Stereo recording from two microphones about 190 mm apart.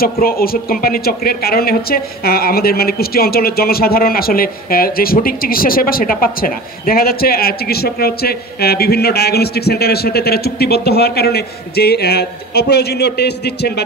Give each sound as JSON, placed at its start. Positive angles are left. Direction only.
{"t": 0.0, "sound": "speech", "side_deg": 50}